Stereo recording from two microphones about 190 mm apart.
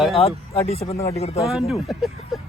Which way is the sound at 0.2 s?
30° left (ahead or behind).